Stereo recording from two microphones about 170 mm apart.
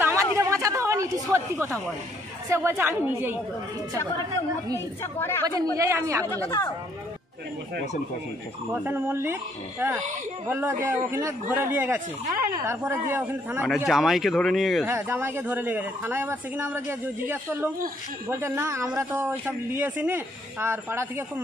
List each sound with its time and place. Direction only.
0.0 s a sound: 15° right (ahead or behind)
2.5 s speech: 15° right (ahead or behind)
4.7 s speech: 15° left (ahead or behind)
5.5 s speech: 20° right (ahead or behind)
6.2 s speech: 15° left (ahead or behind)
8.8 s speech: 10° right (ahead or behind)
13.8 s speech: centre (ahead or behind)
14.9 s speech: 15° right (ahead or behind)